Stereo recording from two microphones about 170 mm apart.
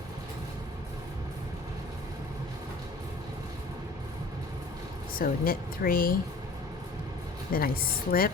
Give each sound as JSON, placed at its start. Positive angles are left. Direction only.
{"t": 5.1, "sound": "speech", "side_deg": 55}
{"t": 7.5, "sound": "speech", "side_deg": 60}